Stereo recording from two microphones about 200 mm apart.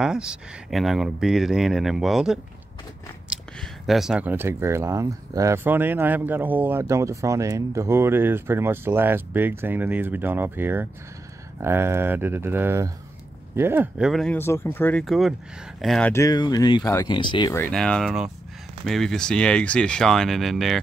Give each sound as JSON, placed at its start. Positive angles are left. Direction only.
{"t": 0.0, "sound": "speech", "side_deg": -5}
{"t": 3.8, "sound": "speech", "side_deg": 0}
{"t": 16.1, "sound": "speech", "side_deg": 15}
{"t": 17.6, "sound": "speech", "side_deg": 5}